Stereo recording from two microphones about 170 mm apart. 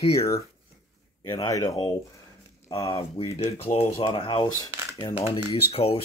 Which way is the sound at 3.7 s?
35° left (ahead or behind).